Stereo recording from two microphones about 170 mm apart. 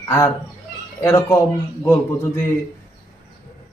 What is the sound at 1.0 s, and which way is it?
Speech, 20° left (ahead or behind).